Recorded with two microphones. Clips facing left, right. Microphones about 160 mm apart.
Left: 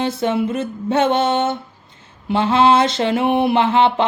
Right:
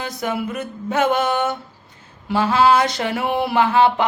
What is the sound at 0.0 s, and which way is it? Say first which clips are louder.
Mantra: left 6 dB; 25° left (ahead or behind).